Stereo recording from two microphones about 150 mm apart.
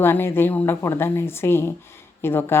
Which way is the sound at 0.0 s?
15° left (ahead or behind).